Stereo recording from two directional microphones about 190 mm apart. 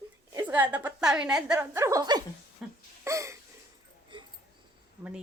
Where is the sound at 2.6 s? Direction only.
Centre (ahead or behind).